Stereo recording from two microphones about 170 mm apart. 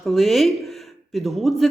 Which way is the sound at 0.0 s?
Centre (ahead or behind).